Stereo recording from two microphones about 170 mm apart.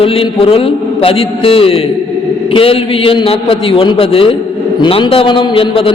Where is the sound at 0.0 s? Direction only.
35° left (ahead or behind).